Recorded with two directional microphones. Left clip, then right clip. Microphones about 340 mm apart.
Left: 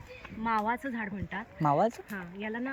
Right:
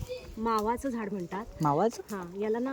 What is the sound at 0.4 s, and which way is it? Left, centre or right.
Speech, centre.